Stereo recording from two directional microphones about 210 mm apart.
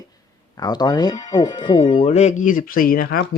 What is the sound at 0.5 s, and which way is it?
Speech, 20° left (ahead or behind).